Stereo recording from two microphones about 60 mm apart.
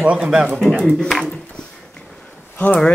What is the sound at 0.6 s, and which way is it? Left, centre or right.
Speech, centre.